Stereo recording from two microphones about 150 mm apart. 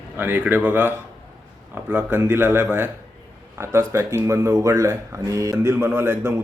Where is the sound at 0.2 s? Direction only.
15° right (ahead or behind).